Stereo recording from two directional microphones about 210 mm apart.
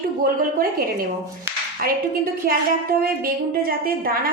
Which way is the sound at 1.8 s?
45° right (ahead or behind).